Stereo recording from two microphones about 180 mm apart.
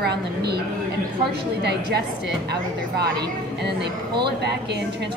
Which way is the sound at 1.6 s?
65° right (ahead or behind).